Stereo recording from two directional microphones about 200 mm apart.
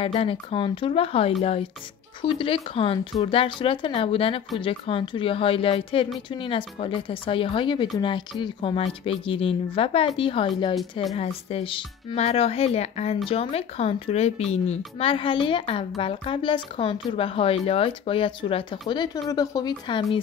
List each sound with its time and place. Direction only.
0.0 s a woman's voice: 30° left (ahead or behind)